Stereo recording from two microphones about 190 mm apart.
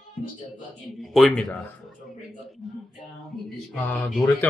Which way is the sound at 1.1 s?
5° left (ahead or behind).